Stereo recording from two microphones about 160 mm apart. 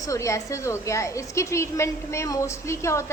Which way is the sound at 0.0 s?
20° left (ahead or behind).